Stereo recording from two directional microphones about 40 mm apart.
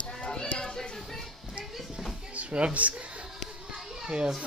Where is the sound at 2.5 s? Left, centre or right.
Right.